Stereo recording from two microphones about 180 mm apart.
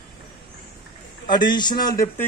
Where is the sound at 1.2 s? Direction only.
25° left (ahead or behind).